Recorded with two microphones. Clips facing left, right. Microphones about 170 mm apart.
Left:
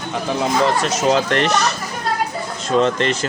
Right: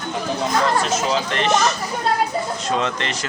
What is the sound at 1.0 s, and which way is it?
Speech, 55° left (ahead or behind).